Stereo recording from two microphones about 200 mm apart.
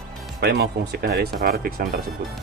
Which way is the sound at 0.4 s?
55° right (ahead or behind).